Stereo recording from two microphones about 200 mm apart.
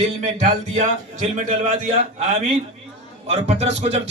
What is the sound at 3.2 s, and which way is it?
Speech, 30° right (ahead or behind).